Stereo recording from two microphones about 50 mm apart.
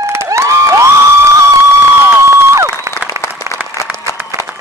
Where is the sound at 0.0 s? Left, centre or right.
Right.